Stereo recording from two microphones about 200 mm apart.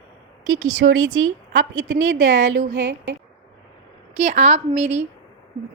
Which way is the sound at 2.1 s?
40° right (ahead or behind).